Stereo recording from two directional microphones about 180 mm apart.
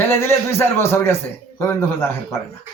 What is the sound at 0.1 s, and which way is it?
A man's voice, 15° left (ahead or behind).